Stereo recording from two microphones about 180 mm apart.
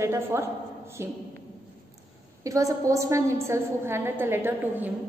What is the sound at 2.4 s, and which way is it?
A woman's voice, 20° right (ahead or behind).